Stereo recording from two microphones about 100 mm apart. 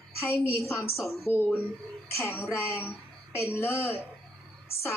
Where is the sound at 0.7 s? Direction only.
25° left (ahead or behind).